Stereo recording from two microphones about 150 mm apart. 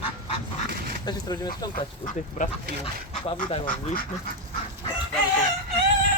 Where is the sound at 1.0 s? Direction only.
25° left (ahead or behind).